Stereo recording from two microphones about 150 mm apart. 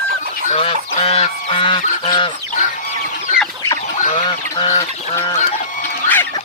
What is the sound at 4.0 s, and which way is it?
Chicken, 55° left (ahead or behind).